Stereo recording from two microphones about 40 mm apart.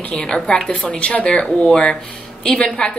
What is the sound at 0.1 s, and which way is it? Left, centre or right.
A woman's voice, left.